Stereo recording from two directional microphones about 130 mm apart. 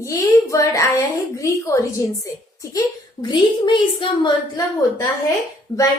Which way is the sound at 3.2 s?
35° left (ahead or behind).